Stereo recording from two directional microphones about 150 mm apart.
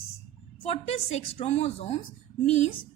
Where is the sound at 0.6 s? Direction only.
45° left (ahead or behind).